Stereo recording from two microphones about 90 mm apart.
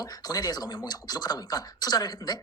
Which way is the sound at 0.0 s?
45° left (ahead or behind).